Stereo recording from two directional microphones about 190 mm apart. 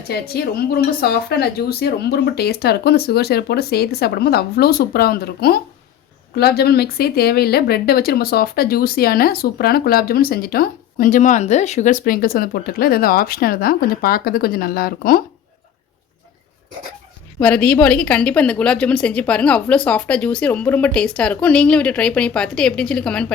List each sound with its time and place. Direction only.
0.1 s speech: 55° left (ahead or behind)
17.4 s a woman's voice: 5° left (ahead or behind)